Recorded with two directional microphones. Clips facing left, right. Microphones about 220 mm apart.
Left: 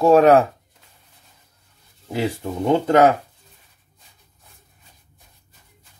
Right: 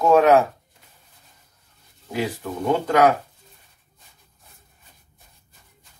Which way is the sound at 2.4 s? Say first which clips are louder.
Left 4 dB; 25° left (ahead or behind).